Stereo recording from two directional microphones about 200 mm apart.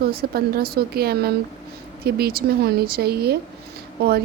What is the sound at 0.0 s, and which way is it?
A woman's voice, 50° right (ahead or behind).